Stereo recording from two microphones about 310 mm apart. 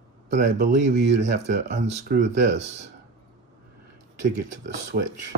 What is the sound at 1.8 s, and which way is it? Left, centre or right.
Speech, right.